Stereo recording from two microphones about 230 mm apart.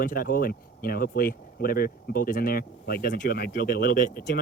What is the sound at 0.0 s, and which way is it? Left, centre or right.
Speech, left.